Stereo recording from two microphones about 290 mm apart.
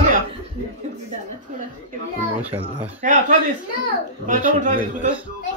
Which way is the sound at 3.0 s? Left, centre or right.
Right.